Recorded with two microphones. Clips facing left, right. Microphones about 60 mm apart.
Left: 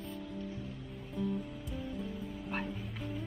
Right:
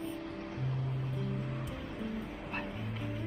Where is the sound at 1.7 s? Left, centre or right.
Right.